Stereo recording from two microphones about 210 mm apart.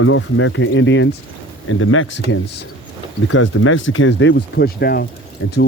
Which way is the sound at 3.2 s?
75° left (ahead or behind).